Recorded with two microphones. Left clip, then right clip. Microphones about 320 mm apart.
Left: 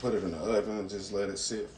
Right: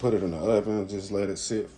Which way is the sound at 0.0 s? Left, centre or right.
Centre.